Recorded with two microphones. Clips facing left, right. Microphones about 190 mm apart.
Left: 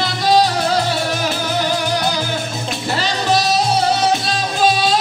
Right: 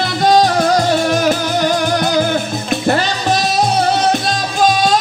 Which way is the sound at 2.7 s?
55° right (ahead or behind).